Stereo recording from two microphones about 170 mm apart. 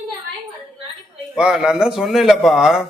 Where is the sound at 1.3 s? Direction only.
5° right (ahead or behind).